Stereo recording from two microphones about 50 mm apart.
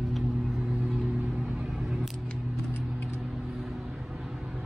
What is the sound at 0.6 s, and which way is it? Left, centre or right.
Vehicle, centre.